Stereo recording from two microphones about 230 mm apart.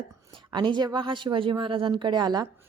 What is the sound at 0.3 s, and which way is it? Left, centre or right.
A woman's voice, centre.